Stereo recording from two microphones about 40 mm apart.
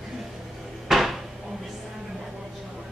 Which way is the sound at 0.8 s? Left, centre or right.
Centre.